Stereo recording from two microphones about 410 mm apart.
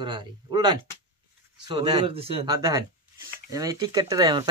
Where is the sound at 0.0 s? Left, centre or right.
Centre.